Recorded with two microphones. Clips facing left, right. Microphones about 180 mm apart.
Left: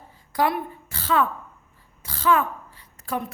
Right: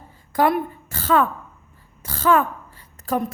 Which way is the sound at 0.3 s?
50° right (ahead or behind).